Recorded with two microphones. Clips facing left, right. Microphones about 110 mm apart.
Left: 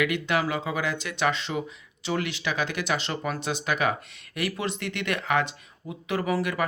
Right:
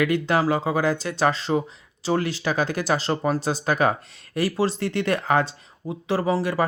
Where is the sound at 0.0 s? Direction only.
35° right (ahead or behind).